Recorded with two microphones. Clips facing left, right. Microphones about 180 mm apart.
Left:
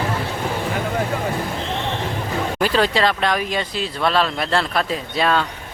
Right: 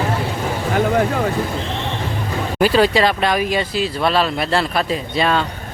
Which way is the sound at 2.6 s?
5° right (ahead or behind).